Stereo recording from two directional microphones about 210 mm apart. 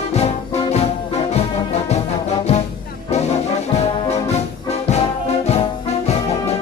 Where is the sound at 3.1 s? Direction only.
30° left (ahead or behind).